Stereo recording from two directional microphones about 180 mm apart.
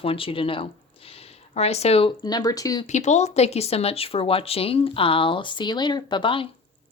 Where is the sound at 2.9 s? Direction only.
40° left (ahead or behind).